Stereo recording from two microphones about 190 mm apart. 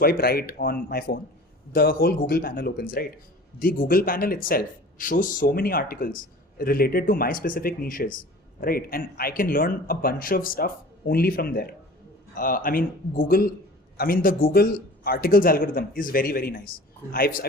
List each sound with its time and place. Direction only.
0.0 s a man's voice: 55° left (ahead or behind)